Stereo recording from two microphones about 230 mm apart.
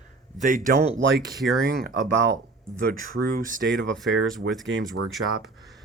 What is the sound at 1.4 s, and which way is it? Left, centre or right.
Speech, centre.